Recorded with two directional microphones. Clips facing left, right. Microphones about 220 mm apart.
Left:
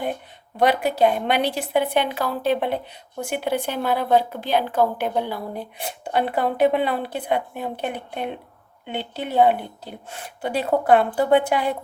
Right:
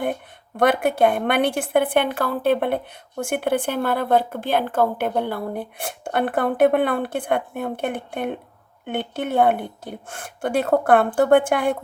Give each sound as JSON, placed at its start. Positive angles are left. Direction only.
{"t": 0.0, "sound": "a woman's voice", "side_deg": -55}